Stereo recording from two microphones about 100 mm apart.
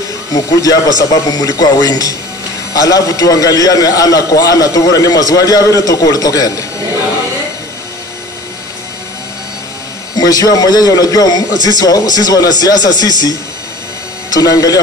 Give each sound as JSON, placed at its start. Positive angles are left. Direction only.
{"t": 0.3, "sound": "a man's voice", "side_deg": 40}
{"t": 10.1, "sound": "a man's voice", "side_deg": 40}
{"t": 14.3, "sound": "a man's voice", "side_deg": 40}